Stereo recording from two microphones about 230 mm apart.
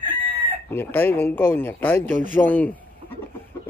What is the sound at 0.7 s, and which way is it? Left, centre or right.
Speech, centre.